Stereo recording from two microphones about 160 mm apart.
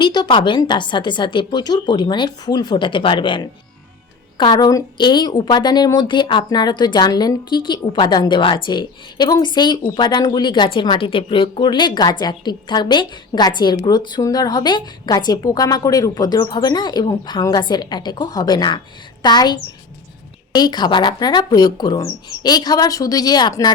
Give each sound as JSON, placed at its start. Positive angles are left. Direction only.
{"t": 0.0, "sound": "a woman's voice", "side_deg": 30}
{"t": 20.6, "sound": "a woman's voice", "side_deg": 25}